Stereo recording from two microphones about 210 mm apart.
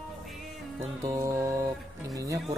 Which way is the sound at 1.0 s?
15° right (ahead or behind).